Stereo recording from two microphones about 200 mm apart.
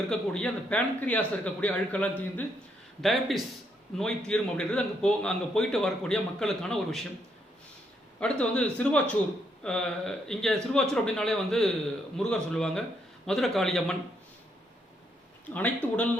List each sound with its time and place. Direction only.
0.1 s a man's voice: 5° left (ahead or behind)
8.2 s a man's voice: 5° left (ahead or behind)
15.4 s speech: 5° left (ahead or behind)